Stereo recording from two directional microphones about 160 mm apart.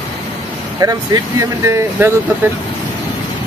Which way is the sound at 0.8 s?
25° right (ahead or behind).